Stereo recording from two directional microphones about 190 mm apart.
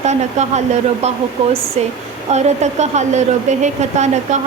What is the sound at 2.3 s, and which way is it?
A woman's voice, 35° right (ahead or behind).